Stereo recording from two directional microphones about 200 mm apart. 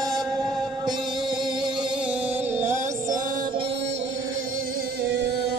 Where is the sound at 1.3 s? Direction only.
Centre (ahead or behind).